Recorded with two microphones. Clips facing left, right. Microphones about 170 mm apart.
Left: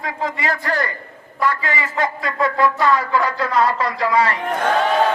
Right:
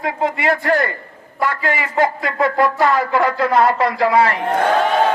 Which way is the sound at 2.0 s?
25° right (ahead or behind).